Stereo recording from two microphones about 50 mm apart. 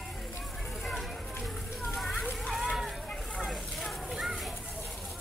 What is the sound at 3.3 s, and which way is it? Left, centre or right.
Vehicle, centre.